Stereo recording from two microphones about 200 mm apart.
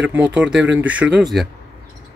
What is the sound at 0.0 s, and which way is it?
Speech, 5° right (ahead or behind).